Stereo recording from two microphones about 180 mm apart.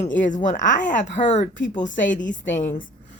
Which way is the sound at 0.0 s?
45° left (ahead or behind).